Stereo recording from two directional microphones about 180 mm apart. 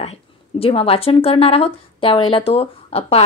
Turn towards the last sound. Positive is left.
turn(degrees=35)  # may be behind; listen again after turning